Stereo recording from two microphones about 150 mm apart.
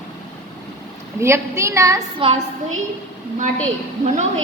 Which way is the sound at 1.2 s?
20° right (ahead or behind).